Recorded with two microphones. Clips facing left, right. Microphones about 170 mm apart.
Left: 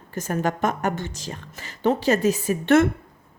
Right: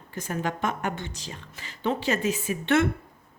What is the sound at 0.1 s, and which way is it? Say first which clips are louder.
A woman's voice: left 5 dB; 45° left (ahead or behind).